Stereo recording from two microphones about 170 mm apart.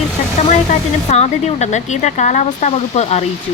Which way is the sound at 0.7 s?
40° left (ahead or behind).